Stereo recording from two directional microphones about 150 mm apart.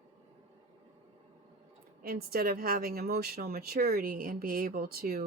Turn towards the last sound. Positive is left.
turn(degrees=-90)